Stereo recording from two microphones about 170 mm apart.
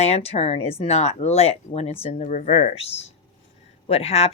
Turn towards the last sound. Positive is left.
turn(degrees=40)  # may be behind; listen again after turning